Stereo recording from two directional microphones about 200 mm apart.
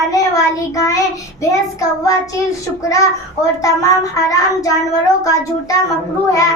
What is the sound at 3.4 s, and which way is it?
Child singing, 15° left (ahead or behind).